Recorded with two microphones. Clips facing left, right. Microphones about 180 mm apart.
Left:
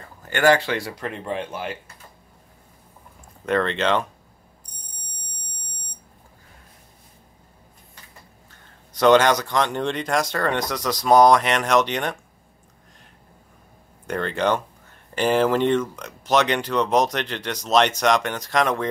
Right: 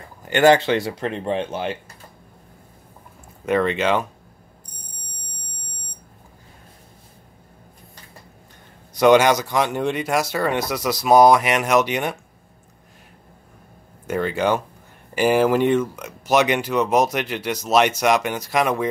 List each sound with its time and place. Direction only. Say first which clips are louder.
0.2 s speech: right 4 dB; 20° right (ahead or behind)
3.4 s speech: right 2 dB; 10° right (ahead or behind)
8.9 s speech: right 2 dB; 10° right (ahead or behind)
14.0 s speech: right 2 dB; 5° right (ahead or behind)